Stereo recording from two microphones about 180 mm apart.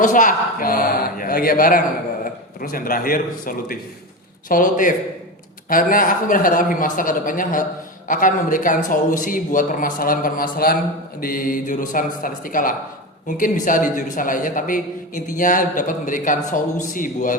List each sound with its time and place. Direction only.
0.0 s a man's voice: 45° left (ahead or behind)